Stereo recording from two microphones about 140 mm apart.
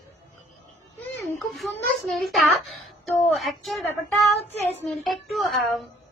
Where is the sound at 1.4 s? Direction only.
Centre (ahead or behind).